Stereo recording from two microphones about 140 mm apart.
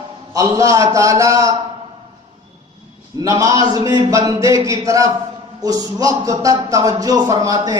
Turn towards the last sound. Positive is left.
turn(degrees=-25)  # may be behind; listen again after turning